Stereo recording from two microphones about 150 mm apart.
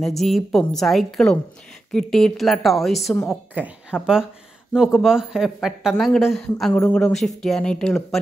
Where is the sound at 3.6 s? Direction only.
10° right (ahead or behind).